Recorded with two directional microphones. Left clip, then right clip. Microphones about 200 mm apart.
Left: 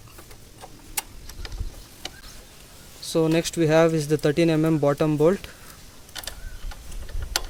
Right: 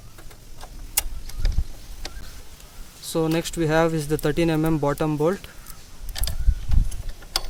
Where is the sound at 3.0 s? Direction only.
Centre (ahead or behind).